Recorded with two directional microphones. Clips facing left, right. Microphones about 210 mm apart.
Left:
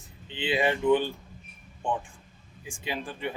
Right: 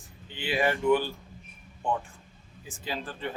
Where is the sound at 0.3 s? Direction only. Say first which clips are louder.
Left 1 dB; 20° left (ahead or behind).